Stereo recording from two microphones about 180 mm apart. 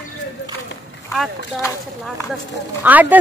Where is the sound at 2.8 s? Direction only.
10° right (ahead or behind).